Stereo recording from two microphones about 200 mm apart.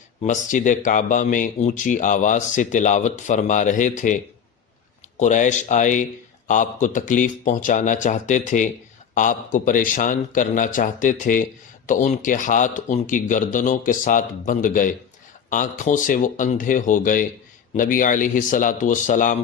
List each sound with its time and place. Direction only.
0.2 s speech: 40° left (ahead or behind)